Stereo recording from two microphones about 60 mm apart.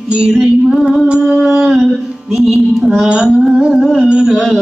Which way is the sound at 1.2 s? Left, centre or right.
Centre.